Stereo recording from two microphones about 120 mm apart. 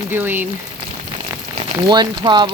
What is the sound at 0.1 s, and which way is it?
Speech, 15° right (ahead or behind).